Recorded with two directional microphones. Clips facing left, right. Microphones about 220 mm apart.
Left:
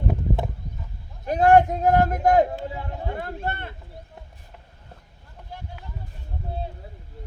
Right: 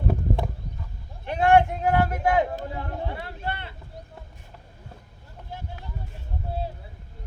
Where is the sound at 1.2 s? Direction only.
40° left (ahead or behind).